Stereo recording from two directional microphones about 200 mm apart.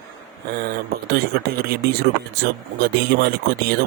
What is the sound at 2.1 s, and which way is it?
Speech, 55° right (ahead or behind).